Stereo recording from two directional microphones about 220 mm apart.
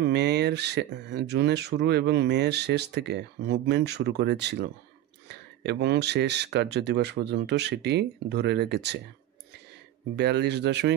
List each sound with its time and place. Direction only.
0.0 s speech: 50° right (ahead or behind)
10.1 s speech: 50° right (ahead or behind)